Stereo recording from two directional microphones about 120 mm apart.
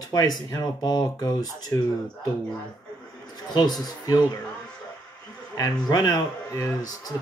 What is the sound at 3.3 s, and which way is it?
Speech, 35° left (ahead or behind).